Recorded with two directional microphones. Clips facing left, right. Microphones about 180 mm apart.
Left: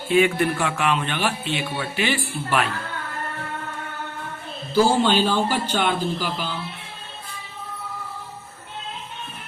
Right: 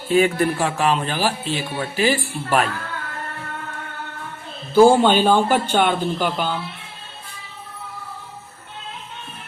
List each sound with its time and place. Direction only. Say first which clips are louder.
0.1 s a man's voice: right 2 dB; 40° right (ahead or behind)
4.7 s a man's voice: right 6 dB; 55° right (ahead or behind)